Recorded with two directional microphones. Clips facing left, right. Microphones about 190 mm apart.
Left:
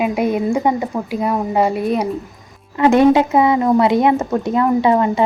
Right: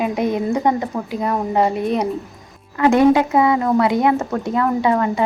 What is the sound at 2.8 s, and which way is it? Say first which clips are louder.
A woman's voice: left 2 dB; 25° left (ahead or behind).